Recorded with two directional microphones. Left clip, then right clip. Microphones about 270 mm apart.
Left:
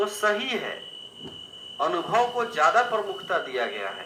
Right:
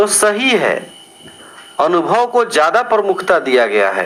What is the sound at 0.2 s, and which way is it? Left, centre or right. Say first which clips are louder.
Speech: right 12 dB; right.